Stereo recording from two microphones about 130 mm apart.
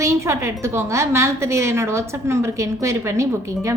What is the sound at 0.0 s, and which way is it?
A woman's voice, 20° right (ahead or behind).